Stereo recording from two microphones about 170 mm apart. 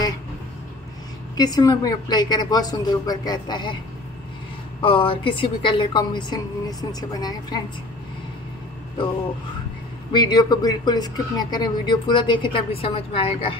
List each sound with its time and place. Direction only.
1.3 s speech: 25° left (ahead or behind)
4.8 s speech: 30° left (ahead or behind)
10.1 s speech: 25° left (ahead or behind)